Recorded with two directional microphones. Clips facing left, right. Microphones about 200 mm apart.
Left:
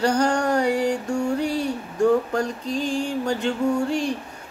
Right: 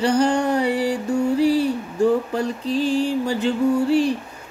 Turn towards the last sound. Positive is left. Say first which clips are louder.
# right 4 dB
turn(degrees=-5)  # may be behind; listen again after turning